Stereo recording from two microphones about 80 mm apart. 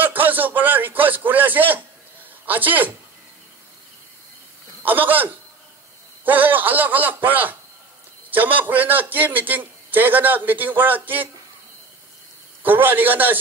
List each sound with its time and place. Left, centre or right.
0.0 s a sound: right
2.4 s speech: right
4.8 s a man's voice: right
12.6 s a man's voice: right